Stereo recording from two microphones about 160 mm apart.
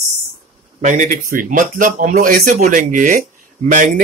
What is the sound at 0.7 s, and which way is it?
Speech, 50° right (ahead or behind).